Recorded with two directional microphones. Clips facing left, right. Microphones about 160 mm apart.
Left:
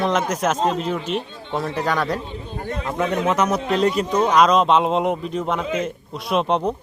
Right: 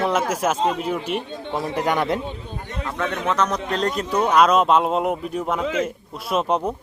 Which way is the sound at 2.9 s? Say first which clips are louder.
Left 3 dB; 10° left (ahead or behind).